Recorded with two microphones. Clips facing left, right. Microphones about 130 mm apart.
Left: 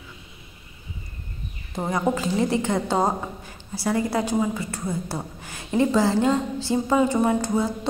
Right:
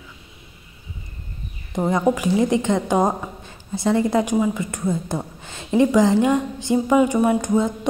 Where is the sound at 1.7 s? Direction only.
20° right (ahead or behind).